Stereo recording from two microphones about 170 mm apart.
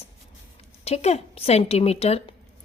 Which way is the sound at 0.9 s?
40° left (ahead or behind).